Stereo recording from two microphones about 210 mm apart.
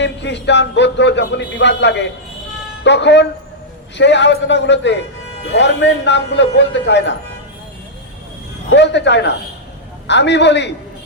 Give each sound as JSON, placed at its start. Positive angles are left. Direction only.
{"t": 0.0, "sound": "speech", "side_deg": 55}
{"t": 8.7, "sound": "speech", "side_deg": 55}